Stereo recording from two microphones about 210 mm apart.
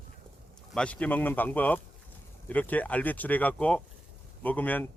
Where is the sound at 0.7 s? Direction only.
5° left (ahead or behind).